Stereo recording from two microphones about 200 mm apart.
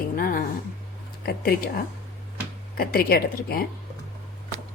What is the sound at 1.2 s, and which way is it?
Speech, 50° left (ahead or behind).